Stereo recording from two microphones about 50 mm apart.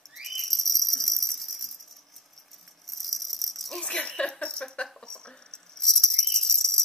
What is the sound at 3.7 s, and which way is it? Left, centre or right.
Jingle bell, centre.